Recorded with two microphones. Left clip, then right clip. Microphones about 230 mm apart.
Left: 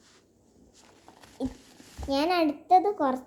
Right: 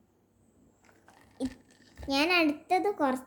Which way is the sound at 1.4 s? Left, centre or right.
Centre.